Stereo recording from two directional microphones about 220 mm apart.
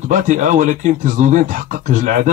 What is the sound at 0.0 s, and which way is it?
A man's voice, 35° right (ahead or behind).